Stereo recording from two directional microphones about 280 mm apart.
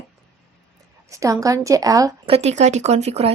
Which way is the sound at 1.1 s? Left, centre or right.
Centre.